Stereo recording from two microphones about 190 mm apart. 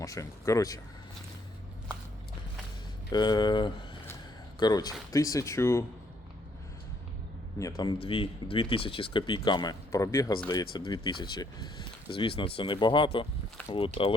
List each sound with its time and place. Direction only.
0.0 s speech: 15° left (ahead or behind)
3.1 s speech: 20° left (ahead or behind)
7.8 s speech: 25° left (ahead or behind)